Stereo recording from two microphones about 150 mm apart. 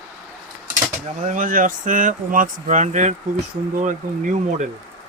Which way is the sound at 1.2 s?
60° right (ahead or behind).